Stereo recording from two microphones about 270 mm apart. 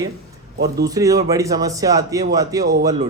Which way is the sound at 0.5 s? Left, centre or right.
Right.